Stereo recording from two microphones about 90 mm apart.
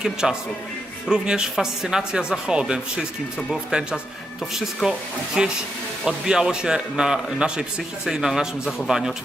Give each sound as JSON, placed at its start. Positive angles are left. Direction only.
{"t": 0.0, "sound": "speech", "side_deg": -5}